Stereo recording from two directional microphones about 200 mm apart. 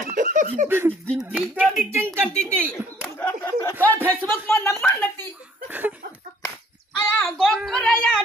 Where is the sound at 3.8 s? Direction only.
10° left (ahead or behind).